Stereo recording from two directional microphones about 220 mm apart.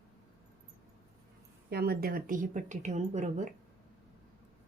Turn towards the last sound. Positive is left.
turn(degrees=-35)  # may be behind; listen again after turning